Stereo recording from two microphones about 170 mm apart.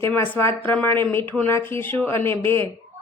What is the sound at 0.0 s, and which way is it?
Speech, 10° left (ahead or behind).